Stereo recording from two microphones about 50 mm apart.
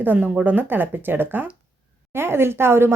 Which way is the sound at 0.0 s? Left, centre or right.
Right.